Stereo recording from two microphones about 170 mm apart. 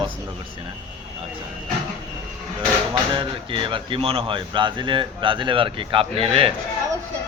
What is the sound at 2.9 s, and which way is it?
Speech, 30° right (ahead or behind).